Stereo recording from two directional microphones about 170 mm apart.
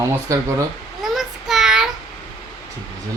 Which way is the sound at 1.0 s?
Centre (ahead or behind).